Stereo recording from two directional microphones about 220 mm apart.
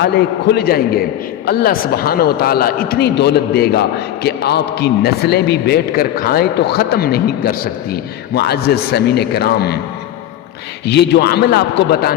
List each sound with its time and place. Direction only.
0.0 s a man's voice: 50° left (ahead or behind)
10.8 s a man's voice: 50° left (ahead or behind)